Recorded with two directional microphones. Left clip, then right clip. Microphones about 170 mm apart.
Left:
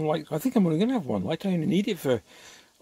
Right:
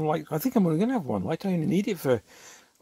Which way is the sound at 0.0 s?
25° right (ahead or behind).